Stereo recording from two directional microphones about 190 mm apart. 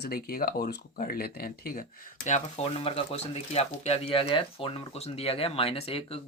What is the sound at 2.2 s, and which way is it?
Speech, 35° left (ahead or behind).